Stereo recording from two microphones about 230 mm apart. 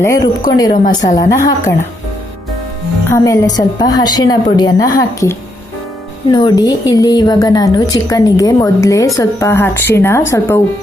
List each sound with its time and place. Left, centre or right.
0.0 s a woman's voice: centre
3.1 s a woman's voice: centre